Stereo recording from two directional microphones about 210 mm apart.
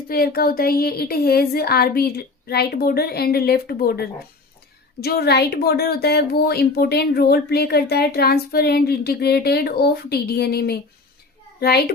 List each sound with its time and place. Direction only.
0.1 s speech: 45° left (ahead or behind)